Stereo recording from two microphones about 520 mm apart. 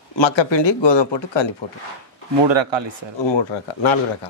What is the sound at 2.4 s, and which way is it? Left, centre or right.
Speech, right.